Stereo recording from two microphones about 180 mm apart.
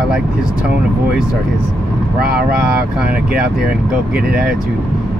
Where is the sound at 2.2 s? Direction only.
60° right (ahead or behind).